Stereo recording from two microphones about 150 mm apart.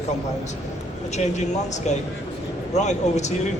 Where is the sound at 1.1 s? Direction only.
50° left (ahead or behind).